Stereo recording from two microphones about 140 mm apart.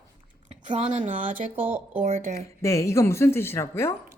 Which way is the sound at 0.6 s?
60° right (ahead or behind).